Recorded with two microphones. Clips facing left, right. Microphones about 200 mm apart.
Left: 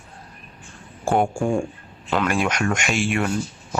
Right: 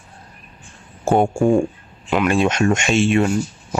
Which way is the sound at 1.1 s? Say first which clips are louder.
Right 5 dB; 20° right (ahead or behind).